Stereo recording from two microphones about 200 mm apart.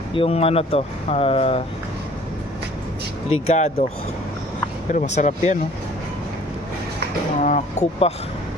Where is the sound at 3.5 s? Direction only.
30° left (ahead or behind).